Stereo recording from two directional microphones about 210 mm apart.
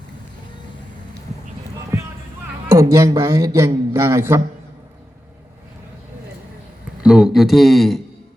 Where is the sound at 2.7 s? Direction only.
15° right (ahead or behind).